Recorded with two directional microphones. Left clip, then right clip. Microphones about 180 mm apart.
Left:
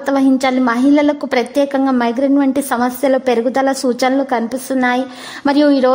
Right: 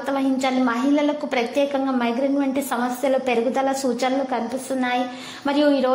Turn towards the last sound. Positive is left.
turn(degrees=45)  # may be behind; listen again after turning